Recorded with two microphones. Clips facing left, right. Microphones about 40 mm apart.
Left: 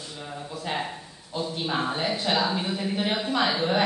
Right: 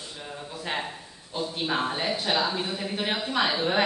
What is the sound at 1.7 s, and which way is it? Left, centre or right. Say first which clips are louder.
Speech: even; centre.